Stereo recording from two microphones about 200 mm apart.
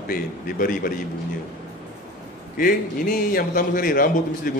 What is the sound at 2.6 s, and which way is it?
A man's voice, 45° left (ahead or behind).